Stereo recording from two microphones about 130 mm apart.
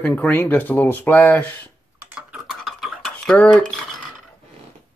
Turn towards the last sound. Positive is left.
turn(degrees=5)  # may be behind; listen again after turning